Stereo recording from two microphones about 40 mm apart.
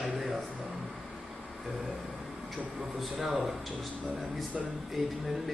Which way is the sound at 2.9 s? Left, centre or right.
Centre.